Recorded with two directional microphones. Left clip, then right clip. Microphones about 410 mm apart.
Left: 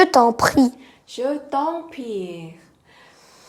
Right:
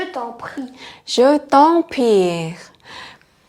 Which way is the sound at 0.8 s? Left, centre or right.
Right.